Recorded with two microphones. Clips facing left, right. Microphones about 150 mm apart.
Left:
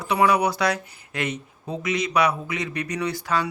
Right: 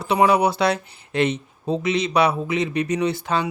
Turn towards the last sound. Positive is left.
turn(degrees=-25)  # may be behind; listen again after turning